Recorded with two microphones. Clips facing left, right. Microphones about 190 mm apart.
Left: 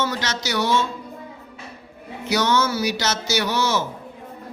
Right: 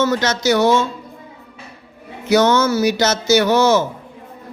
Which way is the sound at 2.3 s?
50° right (ahead or behind).